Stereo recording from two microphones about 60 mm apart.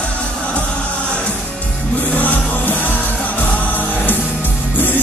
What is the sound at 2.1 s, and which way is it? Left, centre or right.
Music, left.